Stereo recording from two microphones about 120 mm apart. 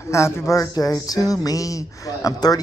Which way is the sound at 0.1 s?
25° left (ahead or behind).